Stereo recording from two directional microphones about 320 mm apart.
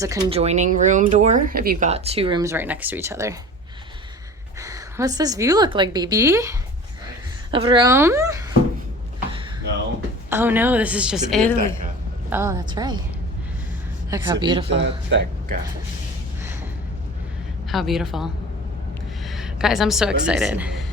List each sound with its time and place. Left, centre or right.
0.0 s speech: centre
4.6 s a woman's voice: centre
10.2 s a woman's voice: centre
12.3 s a woman's voice: centre
14.1 s a woman's voice: centre
14.7 s speech: right
17.7 s a woman's voice: centre